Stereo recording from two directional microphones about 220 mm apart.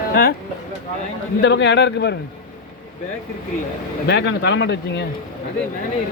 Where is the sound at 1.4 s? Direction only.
55° left (ahead or behind).